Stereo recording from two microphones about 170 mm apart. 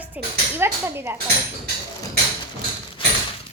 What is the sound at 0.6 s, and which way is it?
Speech, 15° right (ahead or behind).